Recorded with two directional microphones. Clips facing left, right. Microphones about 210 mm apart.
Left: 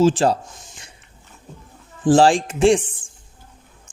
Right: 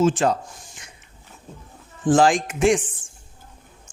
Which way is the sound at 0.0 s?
30° left (ahead or behind).